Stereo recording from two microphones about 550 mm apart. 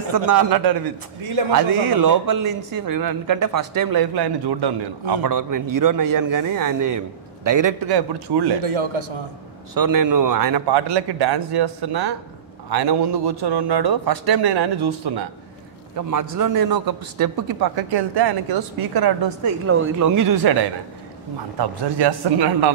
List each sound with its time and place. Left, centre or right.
1.5 s a man's voice: right
8.6 s a man's voice: right
9.8 s a man's voice: right
16.1 s a man's voice: right
19.6 s speech: right
21.5 s a man's voice: right